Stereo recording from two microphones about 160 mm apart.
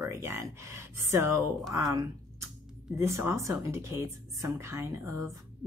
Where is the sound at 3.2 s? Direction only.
15° right (ahead or behind).